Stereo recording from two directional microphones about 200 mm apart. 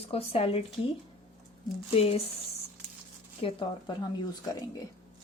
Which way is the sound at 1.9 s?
30° left (ahead or behind).